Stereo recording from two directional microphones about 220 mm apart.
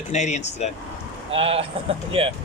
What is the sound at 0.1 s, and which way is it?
Speech, 30° left (ahead or behind).